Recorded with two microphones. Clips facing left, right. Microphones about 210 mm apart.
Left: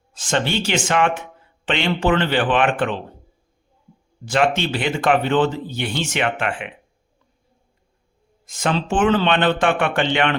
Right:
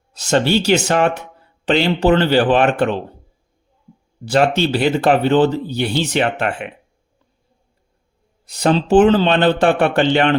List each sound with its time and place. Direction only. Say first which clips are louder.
0.1 s speech: right 6 dB; 40° right (ahead or behind)
4.3 s speech: right 4 dB; 35° right (ahead or behind)
8.4 s speech: right 6 dB; 35° right (ahead or behind)